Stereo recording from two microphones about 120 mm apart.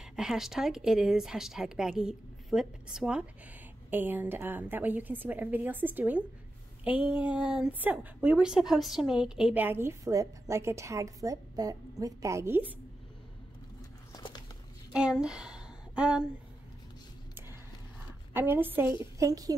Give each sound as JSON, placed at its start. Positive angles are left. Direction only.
{"t": 0.0, "sound": "a woman's voice", "side_deg": -5}
{"t": 14.1, "sound": "a sound", "side_deg": 35}
{"t": 14.9, "sound": "a woman's voice", "side_deg": -10}
{"t": 18.3, "sound": "a woman's voice", "side_deg": -15}